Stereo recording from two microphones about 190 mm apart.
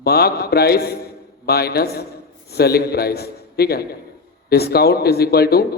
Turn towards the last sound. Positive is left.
turn(degrees=55)  # may be behind; listen again after turning